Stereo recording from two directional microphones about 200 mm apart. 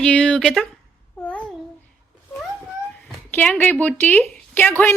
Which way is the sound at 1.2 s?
5° left (ahead or behind).